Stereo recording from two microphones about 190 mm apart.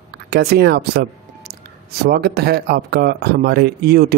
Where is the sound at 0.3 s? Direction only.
55° right (ahead or behind).